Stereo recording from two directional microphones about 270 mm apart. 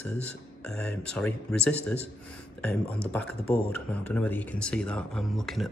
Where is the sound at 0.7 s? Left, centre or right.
Centre.